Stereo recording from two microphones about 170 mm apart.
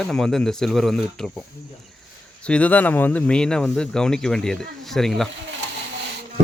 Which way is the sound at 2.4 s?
10° left (ahead or behind).